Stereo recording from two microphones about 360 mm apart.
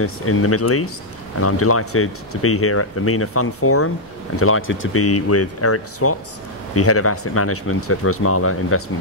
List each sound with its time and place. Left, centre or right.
0.0 s speech: left